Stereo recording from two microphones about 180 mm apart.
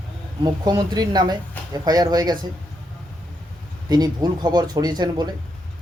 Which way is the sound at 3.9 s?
20° right (ahead or behind).